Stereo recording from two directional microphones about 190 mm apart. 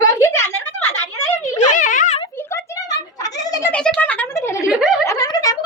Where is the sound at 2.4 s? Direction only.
15° left (ahead or behind).